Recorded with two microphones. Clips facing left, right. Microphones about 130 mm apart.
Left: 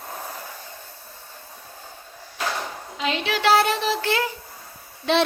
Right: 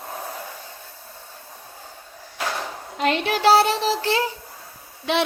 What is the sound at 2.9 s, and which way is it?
A woman's voice, 55° right (ahead or behind).